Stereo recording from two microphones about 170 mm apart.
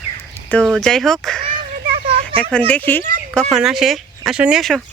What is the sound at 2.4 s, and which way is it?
Speech, 10° left (ahead or behind).